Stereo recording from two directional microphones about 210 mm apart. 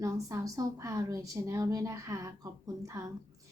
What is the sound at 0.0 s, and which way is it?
A woman's voice, 15° right (ahead or behind).